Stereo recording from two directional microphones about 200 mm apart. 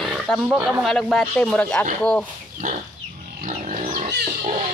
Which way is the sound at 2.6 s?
40° right (ahead or behind).